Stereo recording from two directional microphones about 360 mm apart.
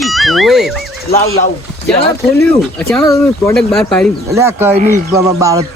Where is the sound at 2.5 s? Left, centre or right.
Centre.